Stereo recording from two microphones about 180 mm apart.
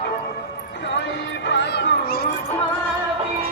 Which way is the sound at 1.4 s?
70° left (ahead or behind).